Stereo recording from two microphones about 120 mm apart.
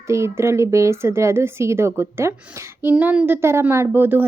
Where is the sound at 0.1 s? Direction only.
25° right (ahead or behind).